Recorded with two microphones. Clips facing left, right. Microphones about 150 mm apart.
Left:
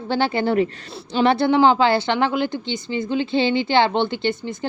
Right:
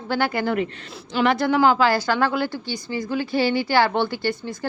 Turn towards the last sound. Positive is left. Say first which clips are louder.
# left 2 dB
turn(degrees=20)  # may be behind; listen again after turning